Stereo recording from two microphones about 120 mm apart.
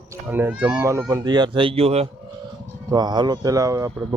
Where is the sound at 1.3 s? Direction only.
40° right (ahead or behind); by 2.0 s 55° right (ahead or behind).